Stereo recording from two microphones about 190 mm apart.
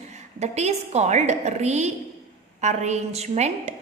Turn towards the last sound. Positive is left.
turn(degrees=-35)  # may be behind; listen again after turning